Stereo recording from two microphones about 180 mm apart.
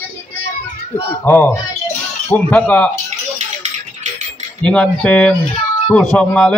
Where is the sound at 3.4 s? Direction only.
40° right (ahead or behind).